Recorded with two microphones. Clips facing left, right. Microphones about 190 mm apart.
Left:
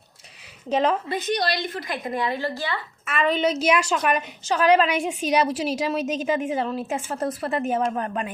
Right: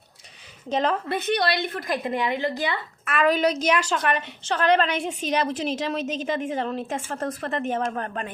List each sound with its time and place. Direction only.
0.7 s a woman's voice: 5° left (ahead or behind)
1.1 s a woman's voice: 60° right (ahead or behind)
2.0 s a woman's voice: 20° right (ahead or behind)
3.0 s a woman's voice: centre (ahead or behind)